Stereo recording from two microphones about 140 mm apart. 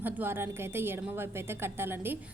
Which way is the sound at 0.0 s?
15° right (ahead or behind).